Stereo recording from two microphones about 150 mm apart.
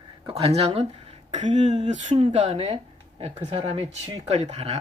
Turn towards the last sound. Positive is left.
turn(degrees=-50)  # may be behind; listen again after turning